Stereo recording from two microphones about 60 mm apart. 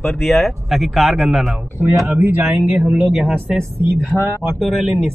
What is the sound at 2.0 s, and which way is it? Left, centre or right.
Speech, right.